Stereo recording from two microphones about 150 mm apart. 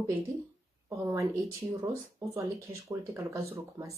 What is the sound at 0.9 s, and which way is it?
Speech, 20° right (ahead or behind).